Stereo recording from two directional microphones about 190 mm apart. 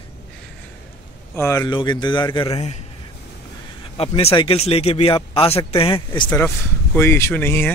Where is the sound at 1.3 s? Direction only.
15° left (ahead or behind); by 2.8 s 35° left (ahead or behind).